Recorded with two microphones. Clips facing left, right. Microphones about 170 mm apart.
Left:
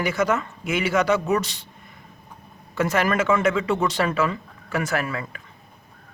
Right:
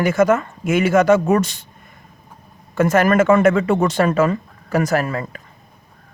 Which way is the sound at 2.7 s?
50° right (ahead or behind).